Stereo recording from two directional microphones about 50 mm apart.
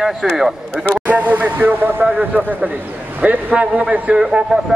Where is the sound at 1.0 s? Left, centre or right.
Right.